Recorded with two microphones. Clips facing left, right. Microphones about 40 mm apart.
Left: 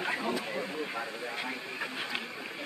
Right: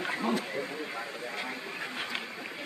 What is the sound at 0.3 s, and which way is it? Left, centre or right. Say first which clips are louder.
Speech: right 2 dB; centre.